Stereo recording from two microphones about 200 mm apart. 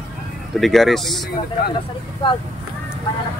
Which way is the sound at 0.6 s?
Centre (ahead or behind).